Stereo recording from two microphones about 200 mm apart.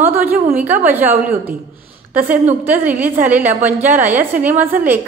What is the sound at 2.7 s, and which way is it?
A woman's voice, 10° right (ahead or behind).